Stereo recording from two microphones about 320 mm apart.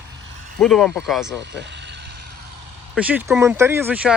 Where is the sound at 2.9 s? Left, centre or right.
Centre.